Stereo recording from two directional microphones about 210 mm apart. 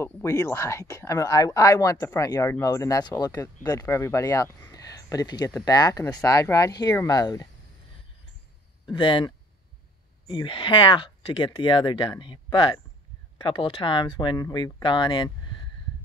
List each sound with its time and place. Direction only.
0.0 s speech: 15° left (ahead or behind)
8.9 s speech: 20° left (ahead or behind)